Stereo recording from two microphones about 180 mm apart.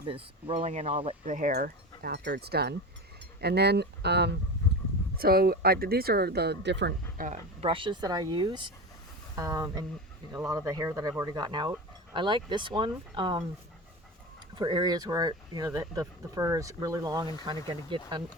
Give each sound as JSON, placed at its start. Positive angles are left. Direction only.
{"t": 0.0, "sound": "speech", "side_deg": -30}
{"t": 1.2, "sound": "speech", "side_deg": -45}
{"t": 5.1, "sound": "speech", "side_deg": -55}
{"t": 7.2, "sound": "speech", "side_deg": -50}
{"t": 7.6, "sound": "speech", "side_deg": -30}
{"t": 14.5, "sound": "speech", "side_deg": -25}